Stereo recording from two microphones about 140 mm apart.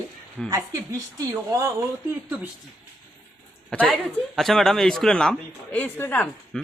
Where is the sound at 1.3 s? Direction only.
20° right (ahead or behind).